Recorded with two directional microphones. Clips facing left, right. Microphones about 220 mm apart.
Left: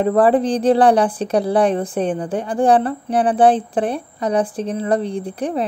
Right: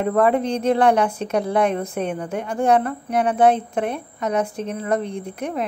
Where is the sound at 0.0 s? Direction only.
35° left (ahead or behind).